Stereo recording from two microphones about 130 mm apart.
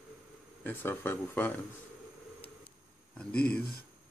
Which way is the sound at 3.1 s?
10° left (ahead or behind).